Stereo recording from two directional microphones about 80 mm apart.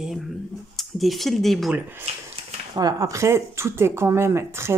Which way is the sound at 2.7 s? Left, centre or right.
Right.